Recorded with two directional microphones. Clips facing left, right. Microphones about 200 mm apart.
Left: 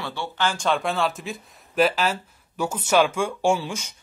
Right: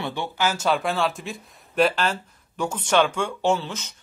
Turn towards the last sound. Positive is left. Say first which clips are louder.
# left 1 dB
turn(degrees=10)  # may be behind; listen again after turning